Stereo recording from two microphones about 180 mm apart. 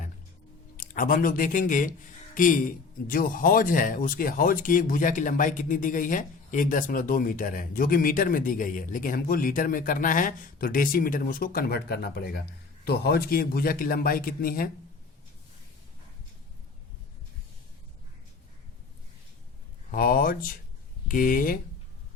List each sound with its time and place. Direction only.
0.8 s speech: 50° left (ahead or behind)
19.9 s speech: 50° left (ahead or behind)